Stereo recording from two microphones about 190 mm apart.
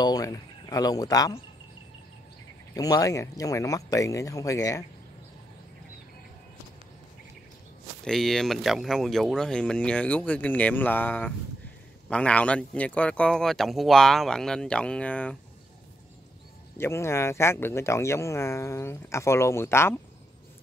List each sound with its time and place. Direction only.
0.0 s speech: 20° left (ahead or behind)
2.7 s speech: 20° left (ahead or behind)
8.0 s speech: centre (ahead or behind)
16.7 s speech: 15° left (ahead or behind)